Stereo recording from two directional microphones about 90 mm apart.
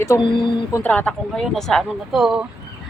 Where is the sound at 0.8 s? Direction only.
15° left (ahead or behind).